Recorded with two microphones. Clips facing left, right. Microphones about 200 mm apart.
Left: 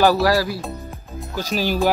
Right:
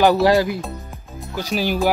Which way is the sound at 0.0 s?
20° right (ahead or behind).